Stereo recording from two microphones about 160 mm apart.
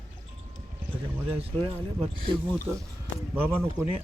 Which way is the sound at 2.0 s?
35° right (ahead or behind).